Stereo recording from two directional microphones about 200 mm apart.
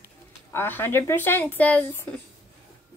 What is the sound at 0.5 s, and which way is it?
Speech, 10° left (ahead or behind).